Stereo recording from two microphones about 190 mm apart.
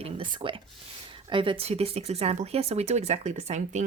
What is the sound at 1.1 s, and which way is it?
A woman's voice, 25° right (ahead or behind).